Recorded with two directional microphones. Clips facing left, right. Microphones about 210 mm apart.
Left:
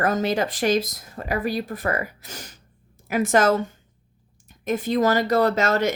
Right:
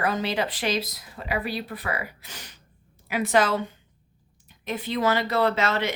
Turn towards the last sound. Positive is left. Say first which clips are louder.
# left 4 dB
turn(degrees=45)  # may be behind; listen again after turning